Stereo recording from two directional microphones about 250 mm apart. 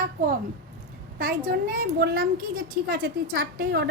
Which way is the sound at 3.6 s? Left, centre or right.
Right.